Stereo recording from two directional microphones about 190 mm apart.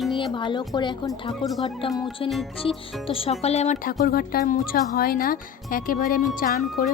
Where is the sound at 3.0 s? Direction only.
30° left (ahead or behind).